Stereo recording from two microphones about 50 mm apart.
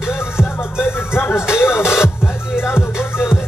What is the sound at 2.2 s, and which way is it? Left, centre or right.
Music, left.